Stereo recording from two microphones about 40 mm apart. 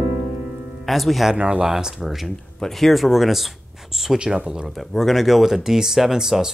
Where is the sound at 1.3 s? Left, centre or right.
Right.